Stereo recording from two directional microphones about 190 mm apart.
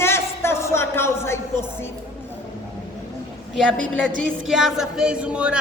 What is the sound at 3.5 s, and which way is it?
Speech, 5° left (ahead or behind).